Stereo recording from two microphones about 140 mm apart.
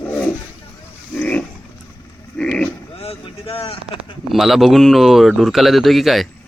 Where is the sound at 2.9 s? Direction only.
45° left (ahead or behind).